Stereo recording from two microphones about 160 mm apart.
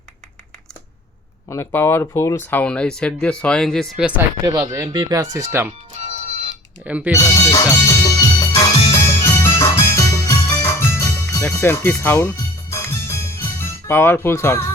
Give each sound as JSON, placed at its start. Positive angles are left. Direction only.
{"t": 1.5, "sound": "speech", "side_deg": 15}
{"t": 4.7, "sound": "speech", "side_deg": -20}
{"t": 6.8, "sound": "speech", "side_deg": -10}
{"t": 7.2, "sound": "music", "side_deg": 20}